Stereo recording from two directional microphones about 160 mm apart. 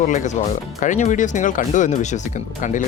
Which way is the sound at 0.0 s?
50° left (ahead or behind).